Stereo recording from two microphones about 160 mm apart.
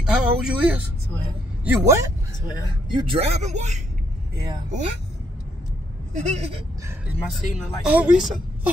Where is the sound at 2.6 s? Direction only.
30° right (ahead or behind); by 3.8 s 45° right (ahead or behind).